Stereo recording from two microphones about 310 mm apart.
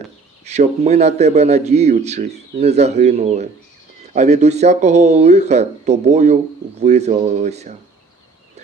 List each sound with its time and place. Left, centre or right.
0.4 s speech: right